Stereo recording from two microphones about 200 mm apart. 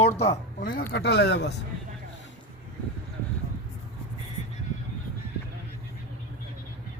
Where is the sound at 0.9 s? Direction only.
55° left (ahead or behind).